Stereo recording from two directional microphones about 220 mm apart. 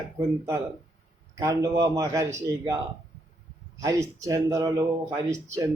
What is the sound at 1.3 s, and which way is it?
A man's voice, 15° right (ahead or behind).